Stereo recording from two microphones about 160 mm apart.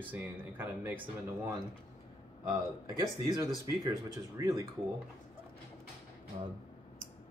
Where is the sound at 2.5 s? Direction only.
20° right (ahead or behind).